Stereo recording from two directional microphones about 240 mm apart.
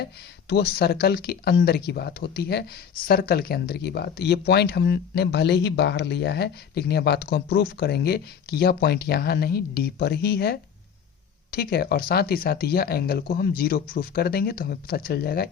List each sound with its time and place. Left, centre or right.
0.0 s speech: left